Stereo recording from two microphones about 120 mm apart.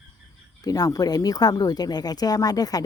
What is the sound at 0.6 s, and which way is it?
Speech, 30° left (ahead or behind).